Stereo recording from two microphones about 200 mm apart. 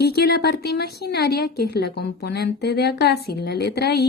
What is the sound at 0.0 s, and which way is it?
A woman's voice, 55° left (ahead or behind).